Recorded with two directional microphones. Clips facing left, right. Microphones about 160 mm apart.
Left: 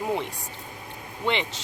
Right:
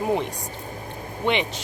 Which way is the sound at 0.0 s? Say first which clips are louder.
Right 4 dB; 20° right (ahead or behind).